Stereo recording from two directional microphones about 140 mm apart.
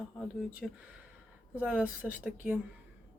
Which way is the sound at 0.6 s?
Centre (ahead or behind).